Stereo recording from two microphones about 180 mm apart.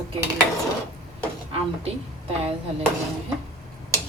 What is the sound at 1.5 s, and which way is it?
Speech, 35° right (ahead or behind).